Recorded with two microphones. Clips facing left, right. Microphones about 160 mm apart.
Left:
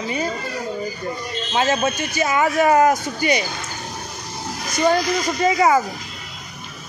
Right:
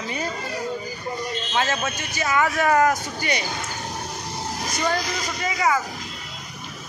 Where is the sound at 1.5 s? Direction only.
20° left (ahead or behind).